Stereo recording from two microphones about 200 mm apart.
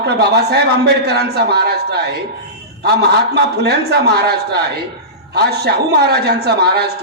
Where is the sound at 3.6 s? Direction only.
55° right (ahead or behind).